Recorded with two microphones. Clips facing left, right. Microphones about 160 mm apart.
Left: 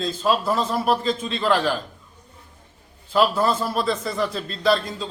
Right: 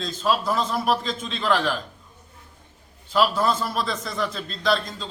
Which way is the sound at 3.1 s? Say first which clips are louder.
Left 2 dB; 5° left (ahead or behind).